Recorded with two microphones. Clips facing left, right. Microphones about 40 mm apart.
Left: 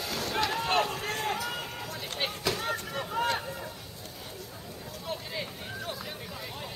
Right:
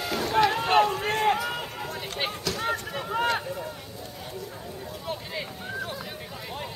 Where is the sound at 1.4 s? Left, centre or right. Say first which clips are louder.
Right 4 dB; centre.